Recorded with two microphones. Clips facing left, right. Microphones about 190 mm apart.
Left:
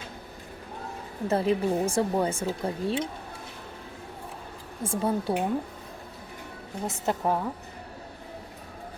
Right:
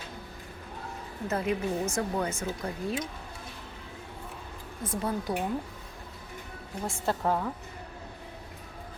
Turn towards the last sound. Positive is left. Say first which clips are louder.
# left 2 dB
turn(degrees=15)  # may be behind; listen again after turning